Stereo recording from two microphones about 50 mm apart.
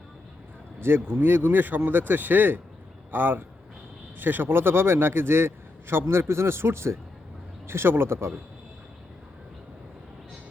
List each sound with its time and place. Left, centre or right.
0.8 s a man's voice: right